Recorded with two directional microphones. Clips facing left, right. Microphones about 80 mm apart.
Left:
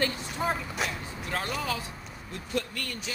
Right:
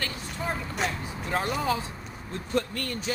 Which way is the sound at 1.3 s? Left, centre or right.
Right.